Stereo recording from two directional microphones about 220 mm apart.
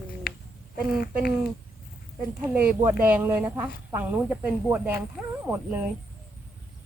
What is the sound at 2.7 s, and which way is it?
Speech, 10° right (ahead or behind).